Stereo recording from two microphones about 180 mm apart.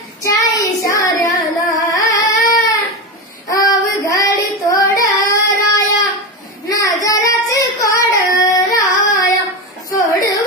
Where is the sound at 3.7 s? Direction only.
20° left (ahead or behind).